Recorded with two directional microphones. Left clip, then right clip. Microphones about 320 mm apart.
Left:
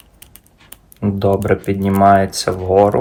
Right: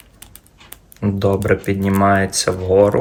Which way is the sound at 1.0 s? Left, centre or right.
Centre.